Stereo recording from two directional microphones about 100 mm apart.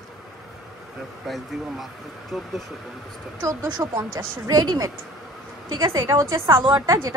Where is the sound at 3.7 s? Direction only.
45° right (ahead or behind).